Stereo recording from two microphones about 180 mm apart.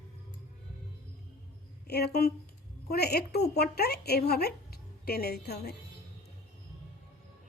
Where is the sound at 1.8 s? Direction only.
60° left (ahead or behind).